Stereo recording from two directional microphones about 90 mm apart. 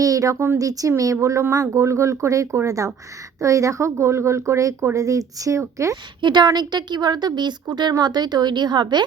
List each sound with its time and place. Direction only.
0.0 s a woman's voice: 40° right (ahead or behind)
6.2 s a woman's voice: 55° right (ahead or behind)